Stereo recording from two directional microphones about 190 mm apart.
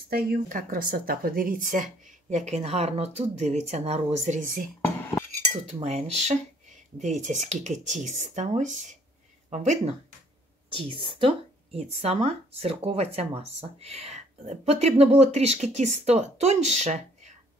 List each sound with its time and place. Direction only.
0.1 s speech: 50° right (ahead or behind)
10.7 s speech: 30° right (ahead or behind)